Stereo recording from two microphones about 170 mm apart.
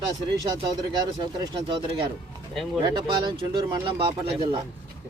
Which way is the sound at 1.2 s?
25° right (ahead or behind).